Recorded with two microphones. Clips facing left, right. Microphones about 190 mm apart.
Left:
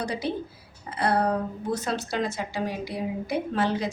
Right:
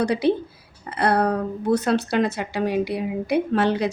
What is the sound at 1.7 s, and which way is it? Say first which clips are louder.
A woman's voice: right 9 dB; 65° right (ahead or behind).